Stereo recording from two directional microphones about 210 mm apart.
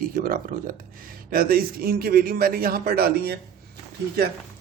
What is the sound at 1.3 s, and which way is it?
Speech, 45° right (ahead or behind).